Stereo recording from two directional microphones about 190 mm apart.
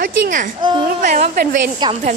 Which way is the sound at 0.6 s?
25° right (ahead or behind).